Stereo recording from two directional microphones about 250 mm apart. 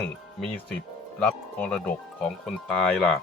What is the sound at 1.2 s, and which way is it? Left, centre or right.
Speech, centre.